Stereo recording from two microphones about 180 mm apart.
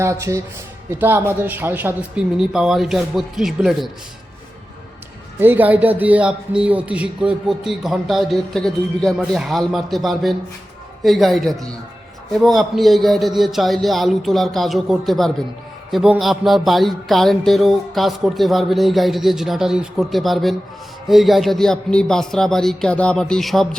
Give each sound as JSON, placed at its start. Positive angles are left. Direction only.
{"t": 0.0, "sound": "speech", "side_deg": -15}
{"t": 5.4, "sound": "speech", "side_deg": -10}